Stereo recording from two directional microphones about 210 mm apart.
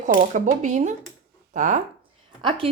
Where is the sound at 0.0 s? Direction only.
35° right (ahead or behind).